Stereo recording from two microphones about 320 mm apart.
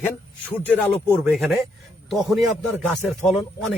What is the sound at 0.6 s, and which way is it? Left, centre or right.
A man's voice, centre.